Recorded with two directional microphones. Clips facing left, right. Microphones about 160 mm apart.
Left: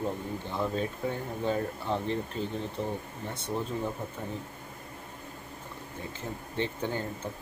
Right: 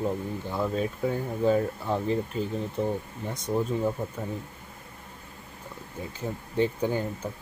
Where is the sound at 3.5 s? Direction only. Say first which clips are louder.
Right 6 dB; 5° right (ahead or behind).